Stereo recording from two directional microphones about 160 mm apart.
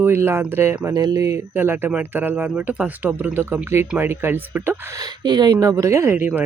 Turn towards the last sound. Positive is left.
turn(degrees=-10)  # may be behind; listen again after turning